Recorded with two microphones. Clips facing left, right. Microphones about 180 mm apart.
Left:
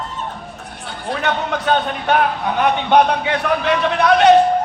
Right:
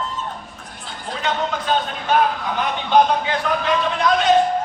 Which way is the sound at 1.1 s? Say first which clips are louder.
Left 3 dB; 65° left (ahead or behind).